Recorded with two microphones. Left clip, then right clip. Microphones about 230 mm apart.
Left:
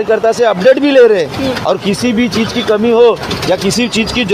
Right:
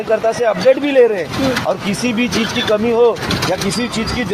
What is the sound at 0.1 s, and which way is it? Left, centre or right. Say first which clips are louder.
Speech: left 4 dB; left.